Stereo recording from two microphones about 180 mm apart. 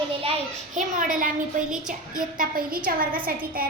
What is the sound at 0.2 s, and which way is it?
A child's voice, 35° right (ahead or behind).